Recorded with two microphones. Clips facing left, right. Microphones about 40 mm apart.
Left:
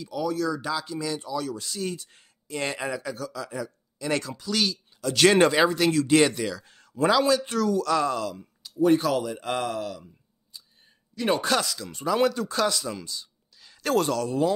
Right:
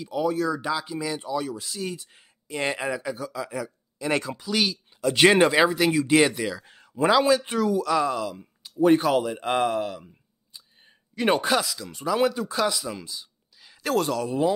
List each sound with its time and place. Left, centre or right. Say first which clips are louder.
0.0 s speech: right 2 dB; right
1.6 s speech: left 1 dB; centre; by 5.4 s right
5.4 s speech: right 1 dB; centre
11.1 s speech: right 3 dB; right
11.4 s speech: right 1 dB; centre
14.2 s speech: right 1 dB; centre